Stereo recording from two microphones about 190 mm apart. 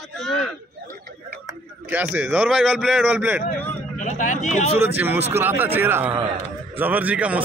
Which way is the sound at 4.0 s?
40° left (ahead or behind).